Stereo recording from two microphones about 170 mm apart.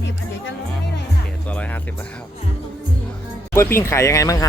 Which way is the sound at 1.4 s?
10° left (ahead or behind).